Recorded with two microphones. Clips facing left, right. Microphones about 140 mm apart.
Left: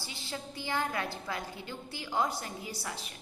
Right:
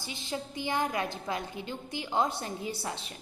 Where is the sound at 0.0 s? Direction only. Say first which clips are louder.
Right 4 dB; 20° right (ahead or behind).